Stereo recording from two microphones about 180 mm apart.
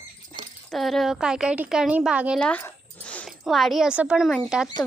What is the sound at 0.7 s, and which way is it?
Speech, centre (ahead or behind).